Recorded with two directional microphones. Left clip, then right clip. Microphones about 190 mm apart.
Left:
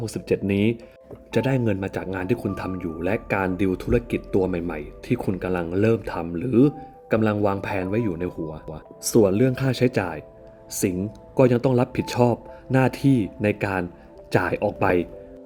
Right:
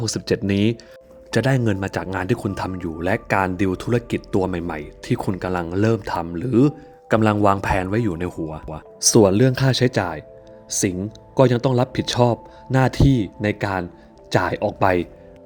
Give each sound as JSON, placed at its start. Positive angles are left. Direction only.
{"t": 0.0, "sound": "a man's voice", "side_deg": -35}